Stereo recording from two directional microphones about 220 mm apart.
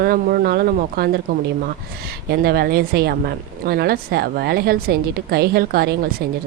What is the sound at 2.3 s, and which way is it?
Speech, 45° right (ahead or behind).